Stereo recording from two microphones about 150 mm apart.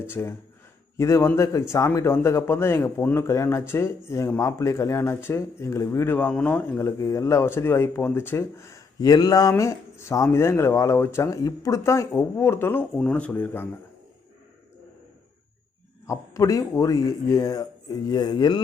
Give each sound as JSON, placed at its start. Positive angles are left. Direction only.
{"t": 0.1, "sound": "a man's voice", "side_deg": 15}
{"t": 16.0, "sound": "speech", "side_deg": 20}